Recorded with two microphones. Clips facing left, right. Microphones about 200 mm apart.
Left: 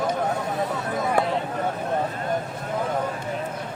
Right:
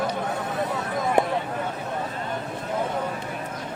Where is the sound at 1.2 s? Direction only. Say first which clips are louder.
Right 2 dB; 20° right (ahead or behind).